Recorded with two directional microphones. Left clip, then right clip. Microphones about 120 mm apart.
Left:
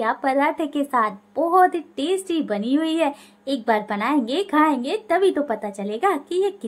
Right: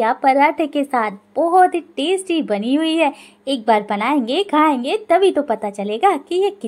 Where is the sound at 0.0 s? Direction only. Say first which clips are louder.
Right 6 dB; 30° right (ahead or behind).